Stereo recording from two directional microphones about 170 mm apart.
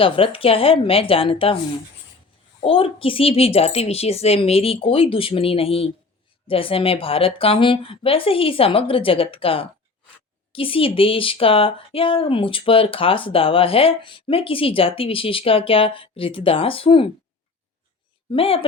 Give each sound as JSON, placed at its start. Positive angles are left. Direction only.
{"t": 0.0, "sound": "speech", "side_deg": 30}
{"t": 2.6, "sound": "speech", "side_deg": 30}
{"t": 18.3, "sound": "speech", "side_deg": 35}